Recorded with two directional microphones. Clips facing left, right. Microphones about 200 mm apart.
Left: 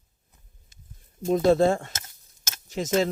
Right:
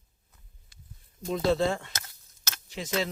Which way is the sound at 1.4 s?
45° left (ahead or behind).